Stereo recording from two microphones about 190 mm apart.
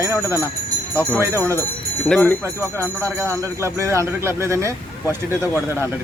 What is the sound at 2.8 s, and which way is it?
Speech, 15° right (ahead or behind).